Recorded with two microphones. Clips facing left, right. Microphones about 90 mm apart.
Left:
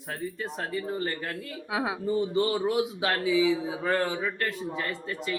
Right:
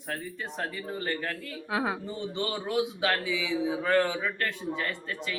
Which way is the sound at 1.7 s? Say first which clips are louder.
Even; centre (ahead or behind).